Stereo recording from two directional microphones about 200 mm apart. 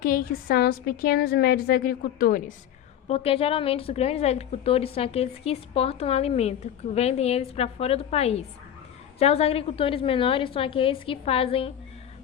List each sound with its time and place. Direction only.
0.0 s a woman's voice: 50° left (ahead or behind)
3.1 s a woman's voice: 30° left (ahead or behind)